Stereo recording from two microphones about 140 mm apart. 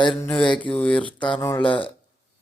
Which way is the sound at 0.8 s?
10° left (ahead or behind).